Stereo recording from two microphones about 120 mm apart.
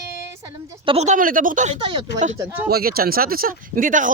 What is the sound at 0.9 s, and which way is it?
Speech, 70° right (ahead or behind).